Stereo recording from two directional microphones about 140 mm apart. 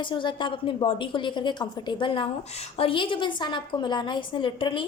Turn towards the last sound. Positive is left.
turn(degrees=35)  # may be behind; listen again after turning